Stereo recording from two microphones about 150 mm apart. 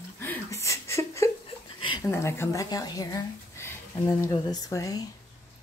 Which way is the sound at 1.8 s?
30° left (ahead or behind).